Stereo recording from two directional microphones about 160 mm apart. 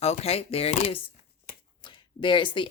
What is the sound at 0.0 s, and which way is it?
Speech, 40° left (ahead or behind).